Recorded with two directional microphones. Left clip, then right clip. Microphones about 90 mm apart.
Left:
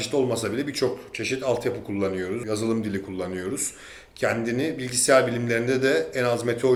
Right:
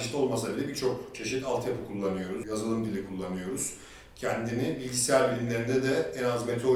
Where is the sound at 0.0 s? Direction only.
40° left (ahead or behind).